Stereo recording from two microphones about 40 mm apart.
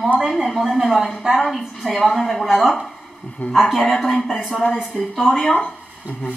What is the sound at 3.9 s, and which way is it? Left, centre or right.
Speech, left.